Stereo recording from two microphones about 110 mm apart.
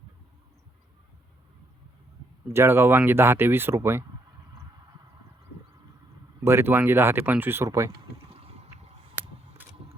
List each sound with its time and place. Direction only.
2.5 s speech: 25° right (ahead or behind)
6.4 s speech: 25° right (ahead or behind)